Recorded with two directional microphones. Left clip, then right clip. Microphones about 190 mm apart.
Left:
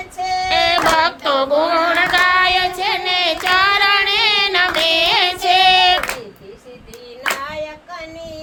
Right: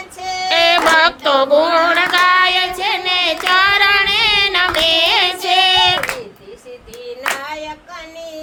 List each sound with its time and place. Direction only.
0.4 s female singing: 10° right (ahead or behind)